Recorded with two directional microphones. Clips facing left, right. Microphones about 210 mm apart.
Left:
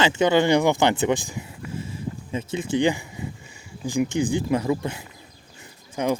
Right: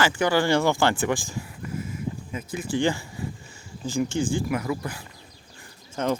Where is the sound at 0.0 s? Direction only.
20° left (ahead or behind).